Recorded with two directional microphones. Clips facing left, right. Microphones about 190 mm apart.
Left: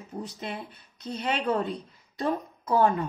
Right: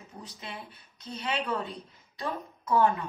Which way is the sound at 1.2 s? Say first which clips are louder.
Left 5 dB; 45° left (ahead or behind).